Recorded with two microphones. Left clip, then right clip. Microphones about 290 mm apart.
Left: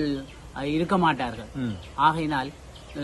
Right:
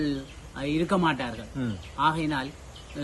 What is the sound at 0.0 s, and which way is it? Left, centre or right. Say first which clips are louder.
A man's voice: left 2 dB; centre.